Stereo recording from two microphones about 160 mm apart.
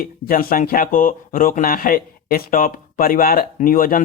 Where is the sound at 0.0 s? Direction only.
60° left (ahead or behind).